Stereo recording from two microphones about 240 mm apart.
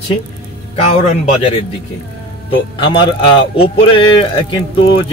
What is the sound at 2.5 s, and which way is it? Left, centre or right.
Speech, centre.